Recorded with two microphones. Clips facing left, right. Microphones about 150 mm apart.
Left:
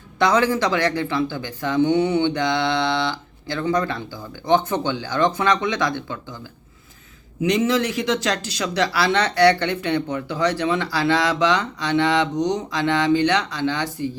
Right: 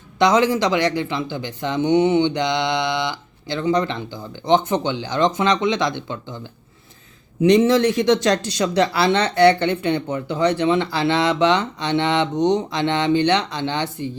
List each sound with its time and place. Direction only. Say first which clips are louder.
0.2 s speech: right 2 dB; 20° right (ahead or behind)
7.4 s speech: right 5 dB; 30° right (ahead or behind)